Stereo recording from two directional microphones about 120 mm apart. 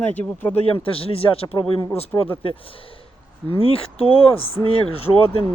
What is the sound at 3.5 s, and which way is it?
Speech, 55° left (ahead or behind).